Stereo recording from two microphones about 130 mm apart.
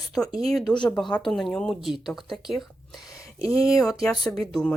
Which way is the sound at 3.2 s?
25° left (ahead or behind).